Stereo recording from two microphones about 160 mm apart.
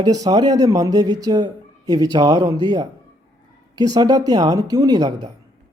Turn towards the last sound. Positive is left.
turn(degrees=-25)  # may be behind; listen again after turning